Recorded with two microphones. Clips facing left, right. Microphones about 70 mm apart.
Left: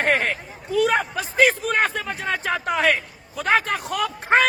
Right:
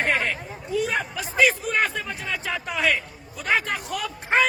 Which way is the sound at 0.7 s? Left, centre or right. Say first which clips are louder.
Left 5 dB; left.